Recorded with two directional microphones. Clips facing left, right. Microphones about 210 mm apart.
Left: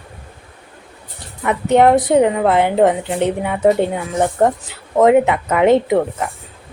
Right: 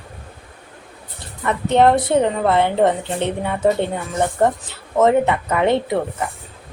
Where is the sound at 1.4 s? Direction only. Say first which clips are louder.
Left 2 dB; 15° left (ahead or behind).